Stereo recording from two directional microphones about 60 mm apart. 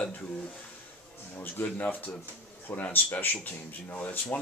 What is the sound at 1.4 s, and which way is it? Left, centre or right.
Speech, left.